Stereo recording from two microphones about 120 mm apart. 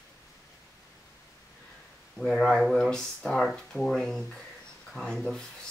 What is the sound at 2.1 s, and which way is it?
Speech, 5° left (ahead or behind).